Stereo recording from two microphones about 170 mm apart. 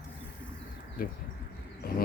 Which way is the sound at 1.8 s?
60° left (ahead or behind).